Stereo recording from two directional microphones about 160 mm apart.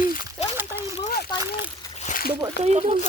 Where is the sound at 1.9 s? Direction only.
50° left (ahead or behind).